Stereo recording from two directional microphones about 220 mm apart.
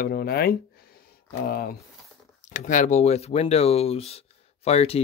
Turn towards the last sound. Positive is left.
turn(degrees=30)  # may be behind; listen again after turning